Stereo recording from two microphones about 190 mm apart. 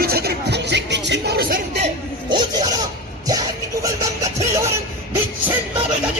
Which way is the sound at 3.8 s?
15° right (ahead or behind).